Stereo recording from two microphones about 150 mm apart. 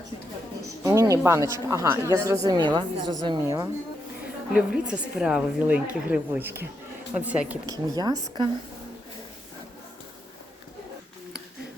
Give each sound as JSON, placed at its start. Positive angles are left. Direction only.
{"t": 0.9, "sound": "speech", "side_deg": -20}
{"t": 4.5, "sound": "a woman's voice", "side_deg": -5}
{"t": 7.7, "sound": "speech", "side_deg": -25}